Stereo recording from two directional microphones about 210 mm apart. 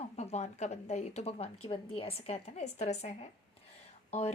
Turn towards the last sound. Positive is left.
turn(degrees=30)  # may be behind; listen again after turning